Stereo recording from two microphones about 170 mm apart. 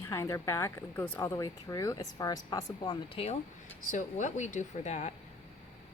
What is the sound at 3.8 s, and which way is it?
Speech, 45° left (ahead or behind).